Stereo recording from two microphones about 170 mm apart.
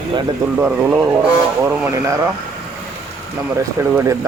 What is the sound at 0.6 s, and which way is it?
Speech, 10° right (ahead or behind).